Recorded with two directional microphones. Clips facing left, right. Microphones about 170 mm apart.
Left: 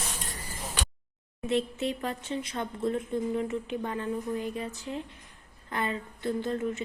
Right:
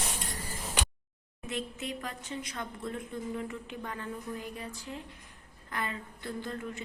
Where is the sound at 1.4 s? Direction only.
30° left (ahead or behind).